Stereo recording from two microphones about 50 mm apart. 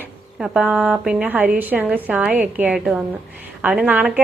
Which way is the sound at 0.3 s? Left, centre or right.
Right.